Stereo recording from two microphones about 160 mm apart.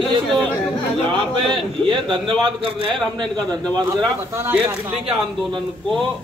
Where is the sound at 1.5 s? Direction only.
30° right (ahead or behind).